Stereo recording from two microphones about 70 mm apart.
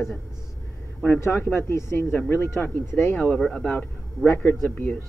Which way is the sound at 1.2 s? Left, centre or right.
Left.